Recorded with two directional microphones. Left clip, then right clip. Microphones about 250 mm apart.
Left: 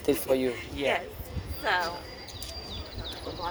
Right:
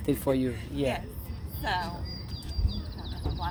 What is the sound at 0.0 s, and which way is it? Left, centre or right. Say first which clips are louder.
Speech: left 2 dB; centre.